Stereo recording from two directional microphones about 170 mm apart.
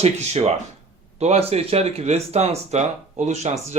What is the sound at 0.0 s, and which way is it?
Speech, 40° right (ahead or behind).